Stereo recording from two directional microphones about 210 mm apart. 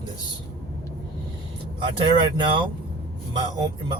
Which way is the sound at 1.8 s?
25° right (ahead or behind).